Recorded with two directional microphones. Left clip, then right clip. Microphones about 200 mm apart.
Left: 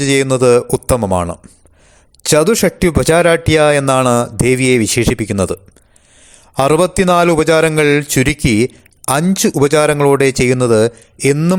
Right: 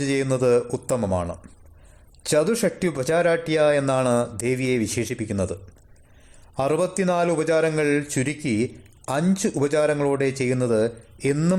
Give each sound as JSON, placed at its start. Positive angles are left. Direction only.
{"t": 0.0, "sound": "a man's voice", "side_deg": 35}
{"t": 6.6, "sound": "a man's voice", "side_deg": 35}